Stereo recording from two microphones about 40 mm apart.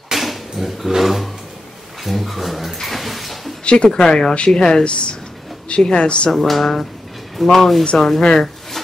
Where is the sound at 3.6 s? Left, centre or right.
Left.